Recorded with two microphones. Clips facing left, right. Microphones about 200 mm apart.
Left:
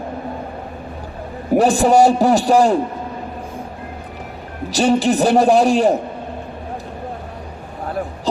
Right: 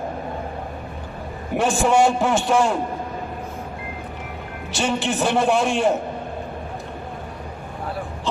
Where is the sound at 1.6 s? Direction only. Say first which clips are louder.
Left 5 dB; 35° left (ahead or behind).